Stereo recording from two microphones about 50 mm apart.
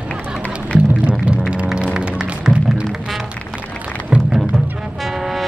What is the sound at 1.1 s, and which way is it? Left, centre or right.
Music, right.